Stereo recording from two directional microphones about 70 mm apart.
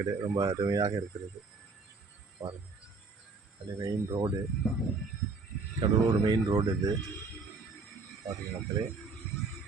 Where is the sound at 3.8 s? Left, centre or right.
Right.